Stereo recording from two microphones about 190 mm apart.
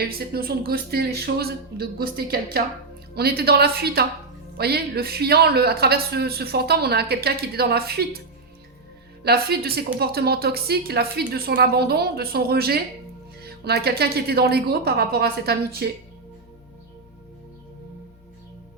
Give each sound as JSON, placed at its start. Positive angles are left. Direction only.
{"t": 0.0, "sound": "a man's voice", "side_deg": -50}
{"t": 9.2, "sound": "a man's voice", "side_deg": -55}